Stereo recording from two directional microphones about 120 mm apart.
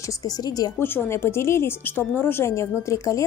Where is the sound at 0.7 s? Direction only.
20° left (ahead or behind).